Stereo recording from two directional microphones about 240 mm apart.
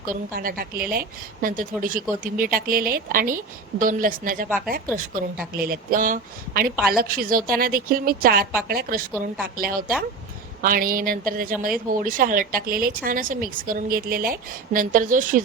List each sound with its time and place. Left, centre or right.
0.0 s speech: right